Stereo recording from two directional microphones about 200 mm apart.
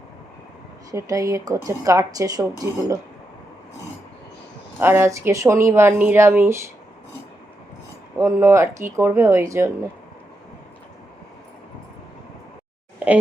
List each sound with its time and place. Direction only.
0.9 s speech: 15° right (ahead or behind)
4.8 s speech: 10° right (ahead or behind)
8.2 s speech: 15° right (ahead or behind)